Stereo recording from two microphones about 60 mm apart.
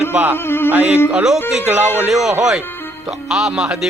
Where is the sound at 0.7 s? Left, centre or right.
Right.